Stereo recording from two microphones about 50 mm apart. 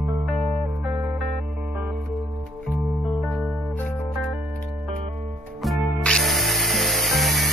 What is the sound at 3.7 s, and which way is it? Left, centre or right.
Music, left.